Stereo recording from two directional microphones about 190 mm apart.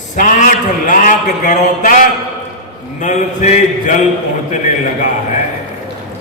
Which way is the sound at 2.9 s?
40° left (ahead or behind).